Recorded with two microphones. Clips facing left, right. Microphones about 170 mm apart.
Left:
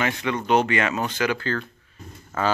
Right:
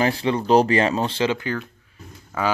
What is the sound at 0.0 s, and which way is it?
Speech, 30° right (ahead or behind).